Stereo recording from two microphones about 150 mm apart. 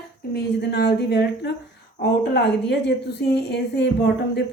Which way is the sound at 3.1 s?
90° left.